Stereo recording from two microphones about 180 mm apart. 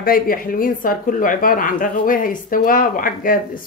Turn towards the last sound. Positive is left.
turn(degrees=50)  # may be behind; listen again after turning